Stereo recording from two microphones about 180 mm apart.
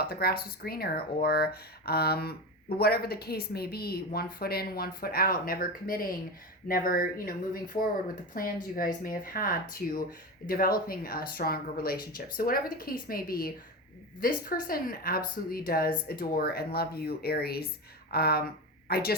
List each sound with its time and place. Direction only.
0.0 s a woman's voice: 60° left (ahead or behind)